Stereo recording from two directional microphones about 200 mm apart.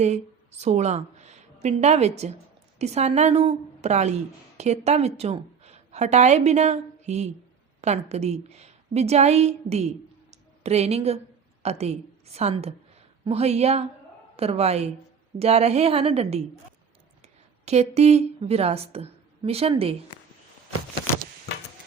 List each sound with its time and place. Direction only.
0.0 s a woman's voice: 35° right (ahead or behind)
17.7 s a woman's voice: 30° right (ahead or behind)